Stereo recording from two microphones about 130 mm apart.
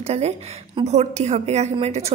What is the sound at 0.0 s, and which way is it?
A woman's voice, 55° right (ahead or behind).